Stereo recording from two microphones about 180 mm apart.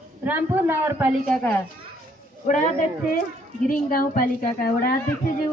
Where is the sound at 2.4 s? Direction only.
45° left (ahead or behind).